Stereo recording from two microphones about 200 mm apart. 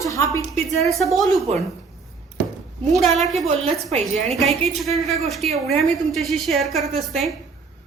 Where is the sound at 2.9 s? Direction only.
Centre (ahead or behind).